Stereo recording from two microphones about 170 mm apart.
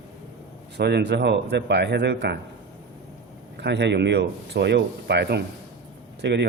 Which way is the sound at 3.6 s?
90° right.